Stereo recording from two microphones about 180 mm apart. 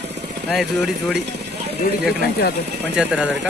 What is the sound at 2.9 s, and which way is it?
Speech, 5° right (ahead or behind).